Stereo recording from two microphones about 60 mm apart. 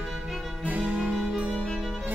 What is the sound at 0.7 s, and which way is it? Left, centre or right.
Music, right.